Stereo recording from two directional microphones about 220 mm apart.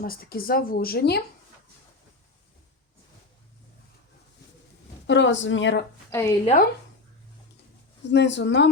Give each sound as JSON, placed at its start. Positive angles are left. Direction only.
{"t": 0.0, "sound": "speech", "side_deg": 40}
{"t": 5.0, "sound": "speech", "side_deg": 55}
{"t": 6.1, "sound": "a woman's voice", "side_deg": 15}
{"t": 6.4, "sound": "speech", "side_deg": 35}
{"t": 8.1, "sound": "speech", "side_deg": 50}